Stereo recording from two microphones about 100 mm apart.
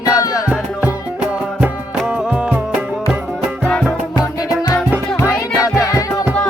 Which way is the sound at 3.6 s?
10° left (ahead or behind).